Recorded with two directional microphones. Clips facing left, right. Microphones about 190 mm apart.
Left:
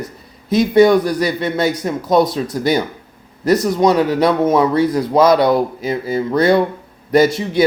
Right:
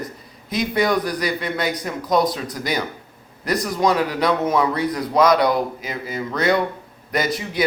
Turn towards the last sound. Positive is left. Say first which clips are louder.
# left 9 dB
turn(degrees=30)  # may be behind; listen again after turning